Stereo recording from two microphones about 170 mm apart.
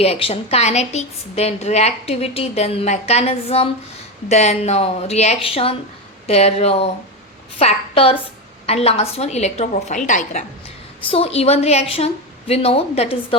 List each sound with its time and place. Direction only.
0.0 s a woman's voice: 35° left (ahead or behind)
11.0 s a woman's voice: 35° left (ahead or behind)